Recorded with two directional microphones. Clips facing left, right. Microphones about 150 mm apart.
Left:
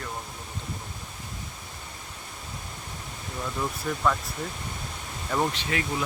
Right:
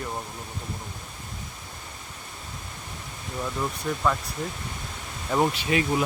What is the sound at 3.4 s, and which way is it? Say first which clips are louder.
Speech: right 2 dB; 5° right (ahead or behind).